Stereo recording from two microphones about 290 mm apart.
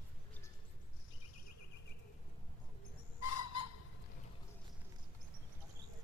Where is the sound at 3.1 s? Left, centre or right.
Left.